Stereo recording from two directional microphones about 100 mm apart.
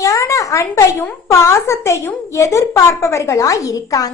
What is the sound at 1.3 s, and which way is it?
A woman's voice, 30° left (ahead or behind).